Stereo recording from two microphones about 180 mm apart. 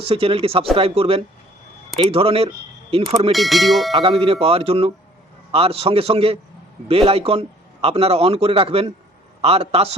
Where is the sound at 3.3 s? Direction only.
Centre (ahead or behind).